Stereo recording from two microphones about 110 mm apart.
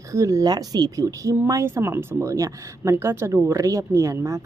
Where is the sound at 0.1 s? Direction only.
30° right (ahead or behind).